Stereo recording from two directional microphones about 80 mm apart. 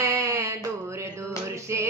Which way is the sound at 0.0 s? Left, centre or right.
Right.